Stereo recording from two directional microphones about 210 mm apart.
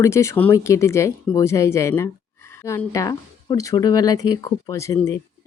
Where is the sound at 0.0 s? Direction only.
15° left (ahead or behind).